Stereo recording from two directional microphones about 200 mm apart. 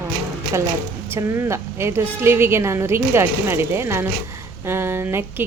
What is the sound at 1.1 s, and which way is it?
A woman's voice, 15° right (ahead or behind).